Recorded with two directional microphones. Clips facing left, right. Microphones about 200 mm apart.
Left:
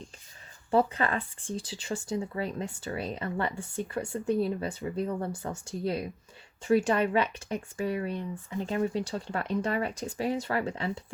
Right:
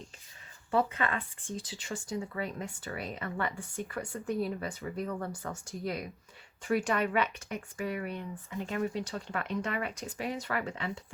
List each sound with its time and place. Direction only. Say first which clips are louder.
0.7 s speech: left 4 dB; 35° left (ahead or behind)